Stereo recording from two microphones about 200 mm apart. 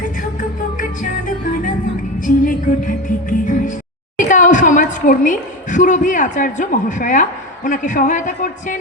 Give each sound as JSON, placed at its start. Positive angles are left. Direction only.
{"t": 2.1, "sound": "music", "side_deg": 40}
{"t": 4.3, "sound": "a woman's voice", "side_deg": 40}